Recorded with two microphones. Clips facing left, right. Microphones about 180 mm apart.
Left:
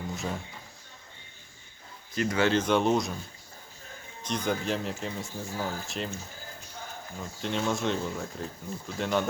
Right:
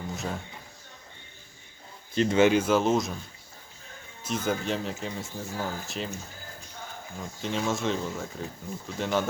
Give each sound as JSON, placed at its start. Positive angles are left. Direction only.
{"t": 0.1, "sound": "a sound", "side_deg": 0}
{"t": 2.1, "sound": "speech", "side_deg": -25}
{"t": 2.5, "sound": "speech", "side_deg": -5}
{"t": 4.2, "sound": "speech", "side_deg": -5}
{"t": 7.2, "sound": "speech", "side_deg": 0}